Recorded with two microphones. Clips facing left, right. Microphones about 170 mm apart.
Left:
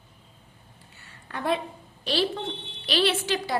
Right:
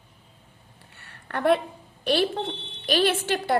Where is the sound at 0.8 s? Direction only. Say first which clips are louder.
Right 3 dB; 65° right (ahead or behind).